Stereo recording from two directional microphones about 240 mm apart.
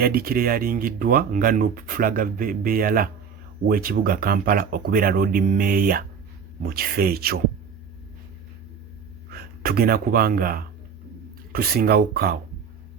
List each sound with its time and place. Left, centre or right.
0.0 s speech: right
9.3 s speech: right